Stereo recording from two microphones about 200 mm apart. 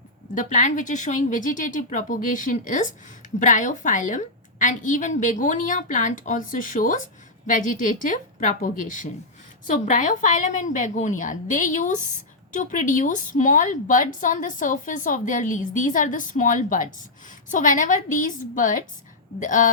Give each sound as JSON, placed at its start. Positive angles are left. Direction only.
{"t": 0.3, "sound": "a woman's voice", "side_deg": 40}